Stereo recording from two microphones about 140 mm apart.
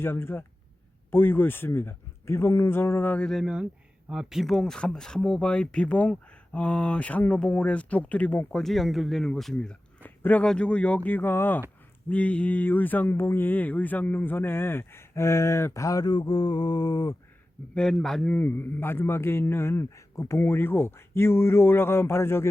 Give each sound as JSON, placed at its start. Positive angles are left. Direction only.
{"t": 0.0, "sound": "speech", "side_deg": 15}
{"t": 8.6, "sound": "speech", "side_deg": 0}
{"t": 17.7, "sound": "speech", "side_deg": 5}